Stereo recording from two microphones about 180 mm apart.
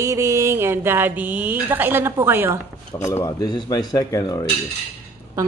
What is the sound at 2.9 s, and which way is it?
Speech, 20° left (ahead or behind).